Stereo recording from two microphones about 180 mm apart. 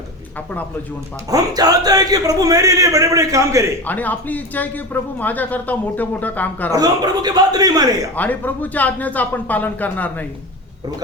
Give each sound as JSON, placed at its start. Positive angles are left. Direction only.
{"t": 1.3, "sound": "a man's voice", "side_deg": -20}
{"t": 3.8, "sound": "speech", "side_deg": 10}
{"t": 6.7, "sound": "a man's voice", "side_deg": -20}
{"t": 8.1, "sound": "speech", "side_deg": 10}